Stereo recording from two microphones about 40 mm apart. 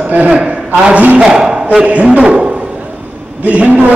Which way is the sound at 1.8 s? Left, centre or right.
Right.